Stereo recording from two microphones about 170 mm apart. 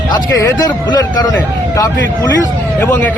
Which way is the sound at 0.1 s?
25° left (ahead or behind).